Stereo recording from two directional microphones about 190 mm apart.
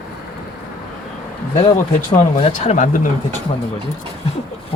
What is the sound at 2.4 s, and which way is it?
Speech, 35° left (ahead or behind).